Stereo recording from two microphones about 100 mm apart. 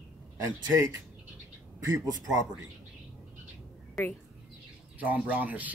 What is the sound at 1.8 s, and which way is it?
Speech, 35° right (ahead or behind).